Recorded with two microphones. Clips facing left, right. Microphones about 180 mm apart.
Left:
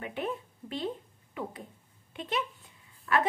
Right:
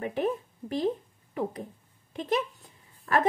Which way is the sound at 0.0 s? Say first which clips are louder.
Right 6 dB; 40° right (ahead or behind).